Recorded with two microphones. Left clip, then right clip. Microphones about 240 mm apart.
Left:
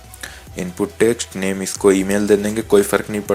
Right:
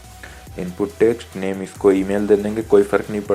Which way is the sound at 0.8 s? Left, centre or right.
Left.